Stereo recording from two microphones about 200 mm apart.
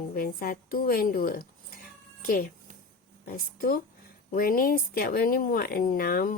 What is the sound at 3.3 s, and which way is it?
Speech, 45° left (ahead or behind).